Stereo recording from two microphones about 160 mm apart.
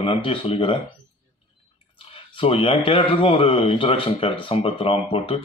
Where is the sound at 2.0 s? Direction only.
35° left (ahead or behind).